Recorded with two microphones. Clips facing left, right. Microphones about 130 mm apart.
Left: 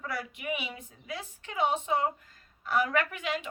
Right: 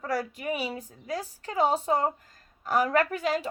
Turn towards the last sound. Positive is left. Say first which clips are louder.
# right 6 dB
turn(degrees=-40)  # may be behind; listen again after turning